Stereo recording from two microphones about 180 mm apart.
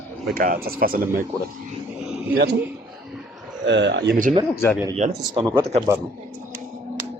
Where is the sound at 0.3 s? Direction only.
55° right (ahead or behind).